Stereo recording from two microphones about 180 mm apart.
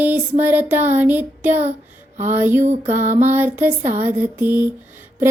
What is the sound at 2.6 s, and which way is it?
Music, 45° right (ahead or behind).